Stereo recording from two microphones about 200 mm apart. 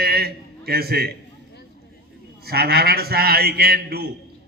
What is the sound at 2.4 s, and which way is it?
A man's voice, 50° right (ahead or behind).